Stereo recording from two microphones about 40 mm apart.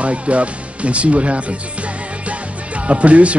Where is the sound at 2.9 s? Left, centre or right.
Right.